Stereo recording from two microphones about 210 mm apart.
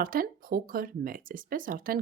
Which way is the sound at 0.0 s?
40° right (ahead or behind).